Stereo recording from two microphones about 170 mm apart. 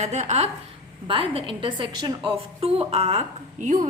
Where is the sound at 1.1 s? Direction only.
30° right (ahead or behind).